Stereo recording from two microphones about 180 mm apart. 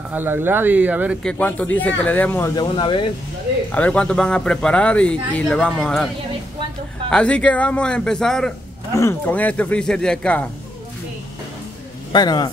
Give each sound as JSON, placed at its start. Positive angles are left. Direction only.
{"t": 0.1, "sound": "speech", "side_deg": -10}
{"t": 1.2, "sound": "speech", "side_deg": 10}
{"t": 3.7, "sound": "a man's voice", "side_deg": 5}
{"t": 7.1, "sound": "a man's voice", "side_deg": 5}
{"t": 12.1, "sound": "a man's voice", "side_deg": 25}